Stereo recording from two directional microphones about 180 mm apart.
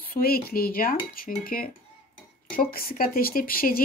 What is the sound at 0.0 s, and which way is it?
Cutlery, 55° left (ahead or behind).